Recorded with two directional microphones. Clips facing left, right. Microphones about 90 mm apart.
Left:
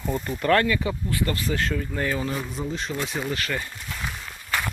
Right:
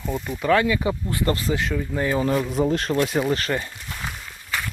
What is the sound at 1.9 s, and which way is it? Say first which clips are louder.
Speech: right 3 dB; 20° right (ahead or behind).